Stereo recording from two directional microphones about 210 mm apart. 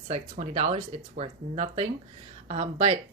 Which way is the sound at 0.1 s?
35° right (ahead or behind).